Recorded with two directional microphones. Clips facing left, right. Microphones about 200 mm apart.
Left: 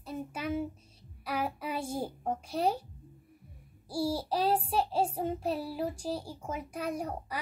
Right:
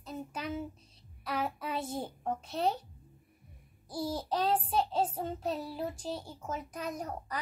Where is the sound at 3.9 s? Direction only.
10° left (ahead or behind).